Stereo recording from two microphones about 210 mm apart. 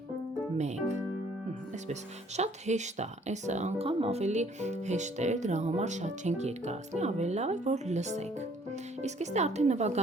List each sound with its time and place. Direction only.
1.9 s speech: 35° right (ahead or behind)